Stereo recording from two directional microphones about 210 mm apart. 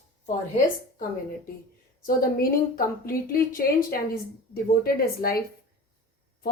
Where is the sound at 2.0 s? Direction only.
45° left (ahead or behind).